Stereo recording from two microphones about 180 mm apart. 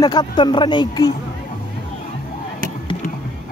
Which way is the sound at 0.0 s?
25° left (ahead or behind).